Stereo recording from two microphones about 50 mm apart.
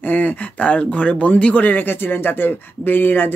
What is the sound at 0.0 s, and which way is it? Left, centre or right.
Speech, left.